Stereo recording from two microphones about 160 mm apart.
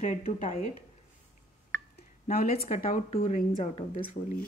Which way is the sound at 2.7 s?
50° left (ahead or behind).